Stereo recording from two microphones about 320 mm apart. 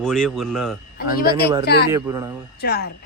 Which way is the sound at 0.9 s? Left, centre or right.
Left.